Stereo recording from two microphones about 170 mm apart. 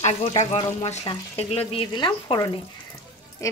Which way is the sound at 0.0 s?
35° left (ahead or behind).